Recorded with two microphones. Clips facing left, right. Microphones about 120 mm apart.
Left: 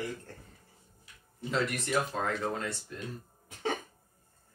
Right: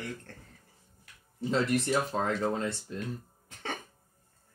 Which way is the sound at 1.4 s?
30° right (ahead or behind).